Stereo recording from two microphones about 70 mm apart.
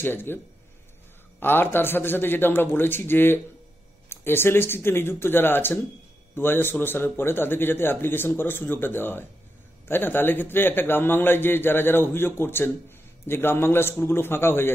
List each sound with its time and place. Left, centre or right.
0.0 s a man's voice: left
1.4 s a man's voice: left